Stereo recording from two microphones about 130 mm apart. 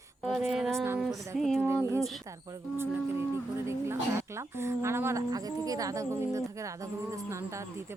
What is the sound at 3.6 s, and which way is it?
A woman's voice, 20° right (ahead or behind).